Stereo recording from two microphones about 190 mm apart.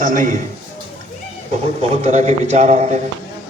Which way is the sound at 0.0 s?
40° right (ahead or behind).